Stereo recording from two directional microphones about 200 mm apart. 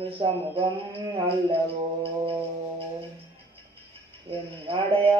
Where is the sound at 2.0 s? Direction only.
25° right (ahead or behind).